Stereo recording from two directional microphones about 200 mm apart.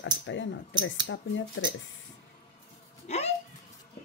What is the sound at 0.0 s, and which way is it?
A woman's voice, 70° left (ahead or behind).